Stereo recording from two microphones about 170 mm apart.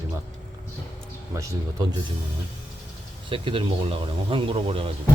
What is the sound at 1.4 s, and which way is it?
Speech, 20° right (ahead or behind).